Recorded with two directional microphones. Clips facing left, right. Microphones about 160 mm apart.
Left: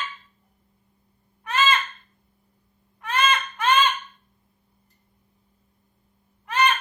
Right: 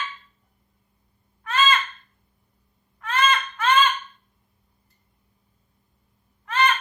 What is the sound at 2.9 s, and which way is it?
Baby cry, 20° left (ahead or behind).